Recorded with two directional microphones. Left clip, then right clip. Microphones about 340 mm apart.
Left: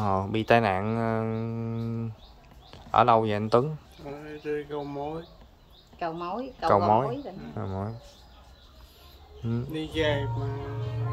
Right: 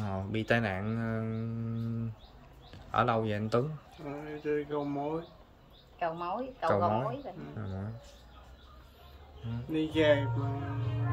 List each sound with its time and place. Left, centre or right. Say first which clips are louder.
0.0 s speech: left 10 dB; centre
4.3 s speech: left 1 dB; centre
5.9 s speech: left 2 dB; left
6.7 s speech: left 8 dB; centre
9.7 s speech: right 2 dB; centre